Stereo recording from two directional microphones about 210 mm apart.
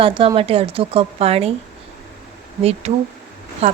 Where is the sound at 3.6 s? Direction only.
30° right (ahead or behind).